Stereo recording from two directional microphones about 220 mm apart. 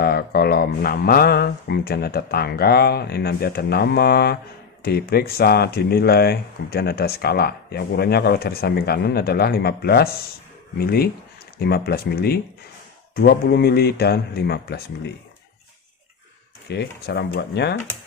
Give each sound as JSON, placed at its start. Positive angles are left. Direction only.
{"t": 0.0, "sound": "speech", "side_deg": 45}
{"t": 16.6, "sound": "speech", "side_deg": 50}